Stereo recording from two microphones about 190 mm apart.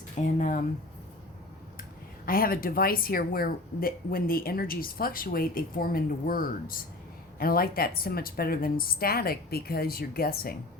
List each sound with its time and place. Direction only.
0.3 s speech: 45° left (ahead or behind)
2.2 s speech: 50° left (ahead or behind)